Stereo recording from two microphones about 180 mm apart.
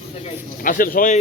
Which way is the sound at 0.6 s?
50° left (ahead or behind).